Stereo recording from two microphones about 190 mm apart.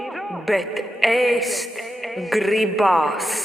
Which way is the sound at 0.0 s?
Centre (ahead or behind).